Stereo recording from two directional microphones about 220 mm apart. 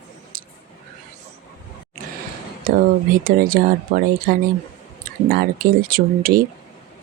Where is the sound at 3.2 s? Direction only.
40° right (ahead or behind).